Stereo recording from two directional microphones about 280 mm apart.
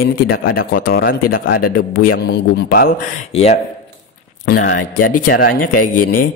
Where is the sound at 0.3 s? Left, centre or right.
Left.